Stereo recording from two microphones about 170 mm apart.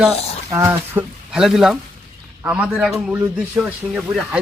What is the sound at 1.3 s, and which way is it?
A man's voice, 5° right (ahead or behind).